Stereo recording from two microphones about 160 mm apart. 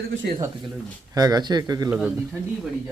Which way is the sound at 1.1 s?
25° right (ahead or behind).